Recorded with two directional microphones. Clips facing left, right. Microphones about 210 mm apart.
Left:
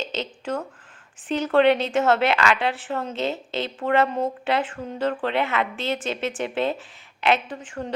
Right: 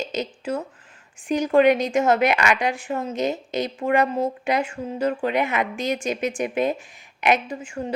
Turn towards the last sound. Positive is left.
turn(degrees=-10)  # may be behind; listen again after turning